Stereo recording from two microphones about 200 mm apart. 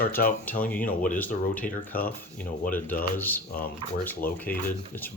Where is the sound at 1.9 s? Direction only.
45° left (ahead or behind).